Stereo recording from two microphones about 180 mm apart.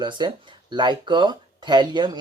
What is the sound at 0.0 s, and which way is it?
Speech, 25° right (ahead or behind).